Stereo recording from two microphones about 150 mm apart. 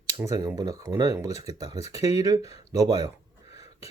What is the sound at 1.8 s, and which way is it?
Speech, 45° left (ahead or behind).